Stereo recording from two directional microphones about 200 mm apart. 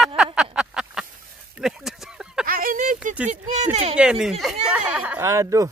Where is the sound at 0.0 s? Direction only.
5° right (ahead or behind).